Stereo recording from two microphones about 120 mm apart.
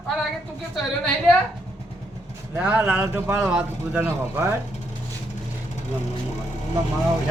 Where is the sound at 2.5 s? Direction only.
15° right (ahead or behind).